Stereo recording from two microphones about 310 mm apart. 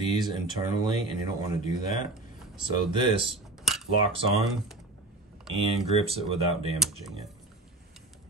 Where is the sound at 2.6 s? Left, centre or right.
Centre.